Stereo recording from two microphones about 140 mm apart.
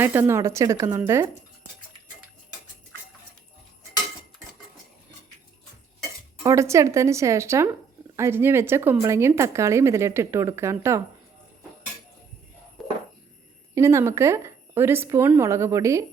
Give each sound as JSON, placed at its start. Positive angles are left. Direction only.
{"t": 0.0, "sound": "speech", "side_deg": -15}
{"t": 6.0, "sound": "speech", "side_deg": -25}
{"t": 13.7, "sound": "speech", "side_deg": -20}